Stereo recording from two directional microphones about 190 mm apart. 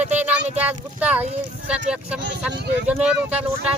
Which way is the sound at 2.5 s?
60° right (ahead or behind).